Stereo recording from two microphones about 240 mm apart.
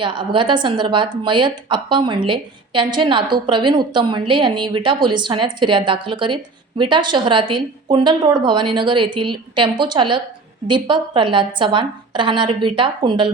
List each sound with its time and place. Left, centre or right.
0.0 s speech: centre